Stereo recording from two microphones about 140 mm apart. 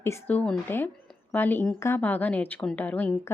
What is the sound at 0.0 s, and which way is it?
A woman's voice, 15° left (ahead or behind).